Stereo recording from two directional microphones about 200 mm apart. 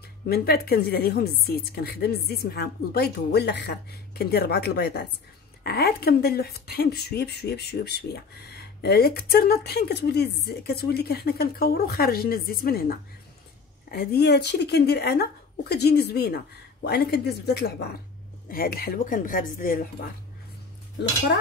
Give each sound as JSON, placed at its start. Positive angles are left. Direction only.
{"t": 0.3, "sound": "a woman's voice", "side_deg": 50}